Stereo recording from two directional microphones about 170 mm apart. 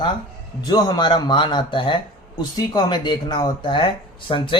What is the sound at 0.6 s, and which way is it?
Speech, 25° left (ahead or behind).